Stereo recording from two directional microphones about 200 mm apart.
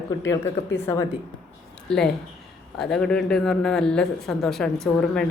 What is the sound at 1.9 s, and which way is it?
Speech, 5° left (ahead or behind).